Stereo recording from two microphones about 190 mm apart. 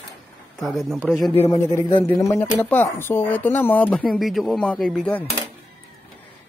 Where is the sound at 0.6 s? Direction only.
Centre (ahead or behind).